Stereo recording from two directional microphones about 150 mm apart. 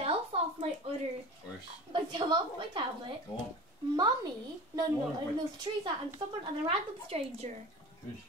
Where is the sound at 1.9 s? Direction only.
30° right (ahead or behind).